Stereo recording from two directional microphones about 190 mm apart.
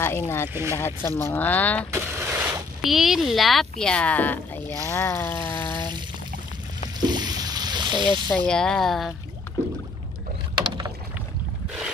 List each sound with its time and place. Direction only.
0.0 s speech: 15° left (ahead or behind)
1.9 s speech: 10° right (ahead or behind); by 4.7 s 10° left (ahead or behind)
4.8 s a sound: 15° left (ahead or behind)
5.8 s pour: 25° right (ahead or behind)
7.1 s a sound: 20° right (ahead or behind)
8.5 s speech: 5° left (ahead or behind)
10.5 s rowboat: 25° right (ahead or behind)